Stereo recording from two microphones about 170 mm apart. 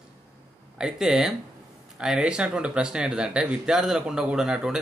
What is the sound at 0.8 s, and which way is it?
Speech, 5° right (ahead or behind).